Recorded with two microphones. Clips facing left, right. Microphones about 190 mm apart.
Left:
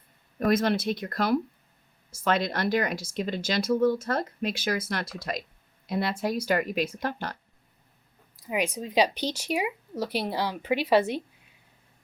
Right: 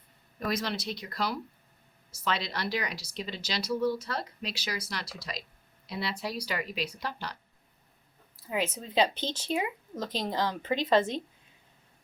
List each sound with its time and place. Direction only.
0.3 s speech: 50° left (ahead or behind)
8.4 s speech: 15° left (ahead or behind)